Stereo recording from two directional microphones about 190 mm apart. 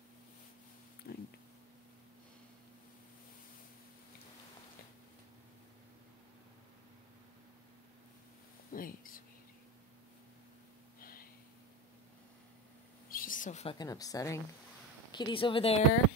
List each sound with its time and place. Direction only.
1.1 s speech: 55° left (ahead or behind)
8.7 s whispering: 50° left (ahead or behind)
11.0 s snort: 50° left (ahead or behind)
13.1 s a sound: 45° left (ahead or behind)
13.7 s speech: 20° left (ahead or behind)